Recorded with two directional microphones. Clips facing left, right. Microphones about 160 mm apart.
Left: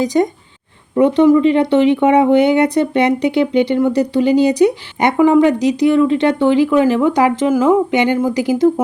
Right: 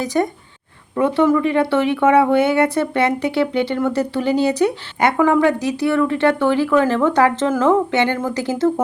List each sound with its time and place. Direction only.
0.0 s speech: 20° left (ahead or behind)